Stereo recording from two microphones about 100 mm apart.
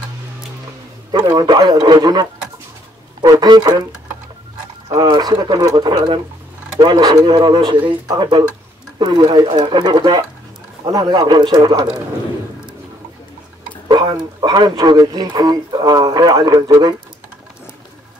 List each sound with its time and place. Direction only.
1.1 s speech: 45° right (ahead or behind)
4.8 s speech: 40° right (ahead or behind)
10.9 s speech: 35° right (ahead or behind)
13.8 s speech: 50° right (ahead or behind)